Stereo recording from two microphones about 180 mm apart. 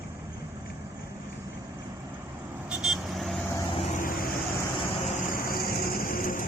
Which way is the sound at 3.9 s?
50° left (ahead or behind).